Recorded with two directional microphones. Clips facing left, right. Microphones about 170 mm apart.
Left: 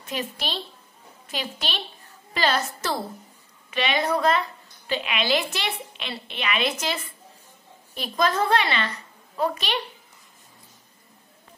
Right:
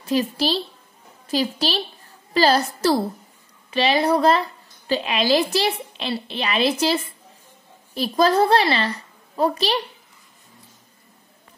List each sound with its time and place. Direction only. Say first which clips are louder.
0.0 s a woman's voice: right 10 dB; 35° right (ahead or behind)